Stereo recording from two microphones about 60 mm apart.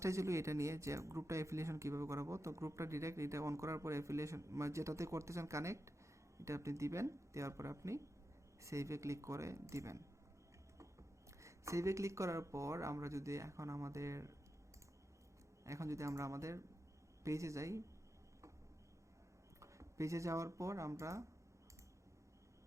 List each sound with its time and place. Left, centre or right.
0.0 s speech: right
11.3 s speech: right
15.6 s speech: right
19.5 s speech: right